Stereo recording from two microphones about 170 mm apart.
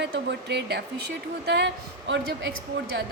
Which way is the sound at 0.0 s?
85° right.